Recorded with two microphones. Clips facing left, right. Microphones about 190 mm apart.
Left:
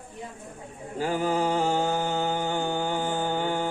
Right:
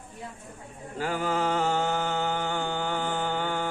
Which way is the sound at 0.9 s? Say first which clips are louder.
Left 3 dB; 15° left (ahead or behind).